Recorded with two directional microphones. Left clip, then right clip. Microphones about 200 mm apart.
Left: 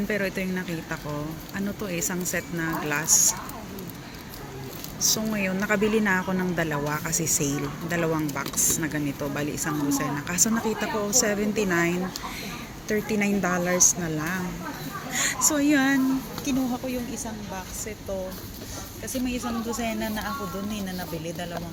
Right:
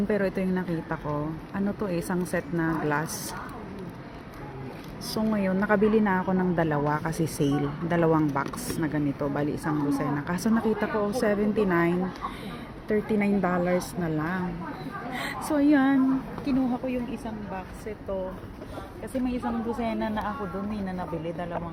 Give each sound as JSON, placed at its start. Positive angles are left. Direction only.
{"t": 0.1, "sound": "a woman's voice", "side_deg": -15}
{"t": 4.9, "sound": "a woman's voice", "side_deg": -15}
{"t": 19.8, "sound": "a woman's voice", "side_deg": -5}